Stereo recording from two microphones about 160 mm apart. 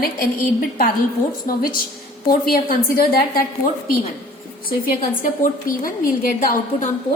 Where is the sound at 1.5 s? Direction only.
65° left (ahead or behind).